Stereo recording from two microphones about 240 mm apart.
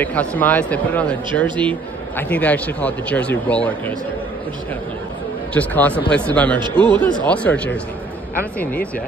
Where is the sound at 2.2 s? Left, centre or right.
Centre.